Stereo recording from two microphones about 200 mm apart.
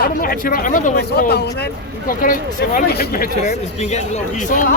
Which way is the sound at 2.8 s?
50° left (ahead or behind).